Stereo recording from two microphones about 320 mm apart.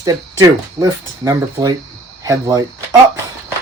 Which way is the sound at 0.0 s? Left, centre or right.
Centre.